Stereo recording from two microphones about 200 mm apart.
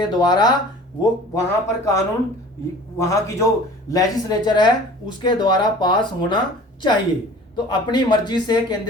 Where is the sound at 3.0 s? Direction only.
15° left (ahead or behind).